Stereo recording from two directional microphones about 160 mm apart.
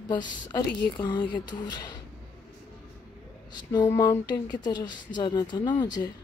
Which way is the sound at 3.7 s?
25° left (ahead or behind).